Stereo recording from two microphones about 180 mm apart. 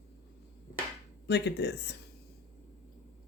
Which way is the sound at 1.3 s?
70° left (ahead or behind).